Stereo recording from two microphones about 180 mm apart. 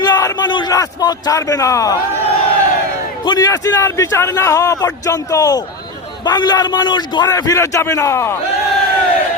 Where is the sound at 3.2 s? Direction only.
20° left (ahead or behind).